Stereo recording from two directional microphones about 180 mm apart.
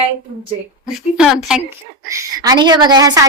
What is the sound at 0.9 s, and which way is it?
Speech, 5° right (ahead or behind).